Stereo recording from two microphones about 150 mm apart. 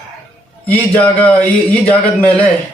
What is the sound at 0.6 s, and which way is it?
Speech, 10° left (ahead or behind).